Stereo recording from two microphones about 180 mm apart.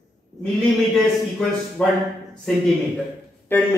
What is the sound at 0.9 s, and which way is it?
Speech, 5° left (ahead or behind).